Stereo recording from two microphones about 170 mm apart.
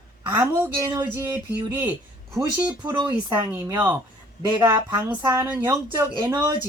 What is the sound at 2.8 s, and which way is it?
Speech, 25° right (ahead or behind).